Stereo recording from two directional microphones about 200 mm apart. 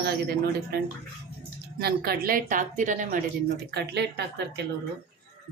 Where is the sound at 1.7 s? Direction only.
50° right (ahead or behind).